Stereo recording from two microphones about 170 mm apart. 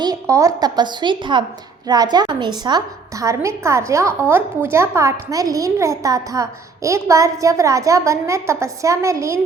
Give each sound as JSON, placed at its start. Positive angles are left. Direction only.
{"t": 0.0, "sound": "a woman's voice", "side_deg": -20}